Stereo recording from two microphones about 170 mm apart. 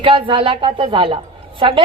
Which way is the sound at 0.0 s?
30° right (ahead or behind).